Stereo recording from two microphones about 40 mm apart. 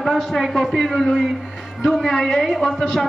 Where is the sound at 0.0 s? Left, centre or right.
Centre.